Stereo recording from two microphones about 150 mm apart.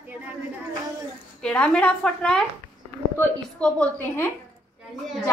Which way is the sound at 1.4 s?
5° left (ahead or behind).